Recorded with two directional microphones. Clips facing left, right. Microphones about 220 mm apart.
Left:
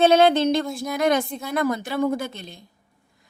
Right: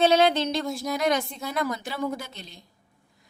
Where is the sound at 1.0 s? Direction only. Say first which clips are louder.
Left 6 dB; 50° left (ahead or behind).